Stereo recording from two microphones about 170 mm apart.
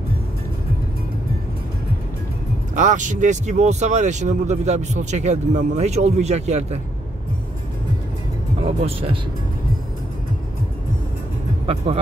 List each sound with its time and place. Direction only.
2.7 s speech: 45° right (ahead or behind)
8.6 s speech: 30° right (ahead or behind)
11.6 s speech: 35° right (ahead or behind)